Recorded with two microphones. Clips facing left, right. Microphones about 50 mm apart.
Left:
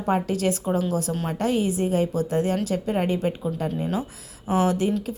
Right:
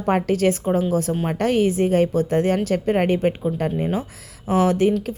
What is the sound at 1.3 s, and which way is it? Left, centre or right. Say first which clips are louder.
Speech: right 4 dB; right.